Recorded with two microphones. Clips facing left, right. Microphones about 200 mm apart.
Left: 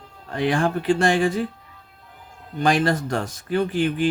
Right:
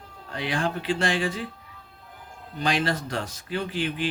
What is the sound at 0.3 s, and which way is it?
Speech, 50° left (ahead or behind).